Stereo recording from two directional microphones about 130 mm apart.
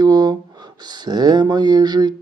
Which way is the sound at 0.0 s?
30° right (ahead or behind).